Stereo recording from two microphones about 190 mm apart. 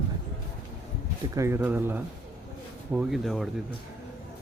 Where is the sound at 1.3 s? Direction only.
15° right (ahead or behind).